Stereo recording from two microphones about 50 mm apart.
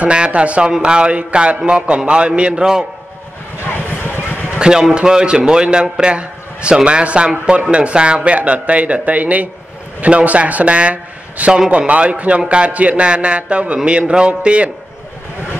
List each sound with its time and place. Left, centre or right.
0.0 s a man's voice: right
3.5 s vehicle: left
4.6 s a man's voice: centre